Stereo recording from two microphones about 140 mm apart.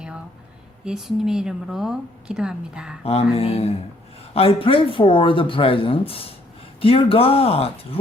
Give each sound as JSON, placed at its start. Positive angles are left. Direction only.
{"t": 0.9, "sound": "a woman's voice", "side_deg": -5}
{"t": 3.0, "sound": "speech", "side_deg": 45}